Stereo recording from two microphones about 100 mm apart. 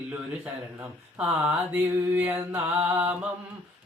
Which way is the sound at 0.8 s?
15° right (ahead or behind).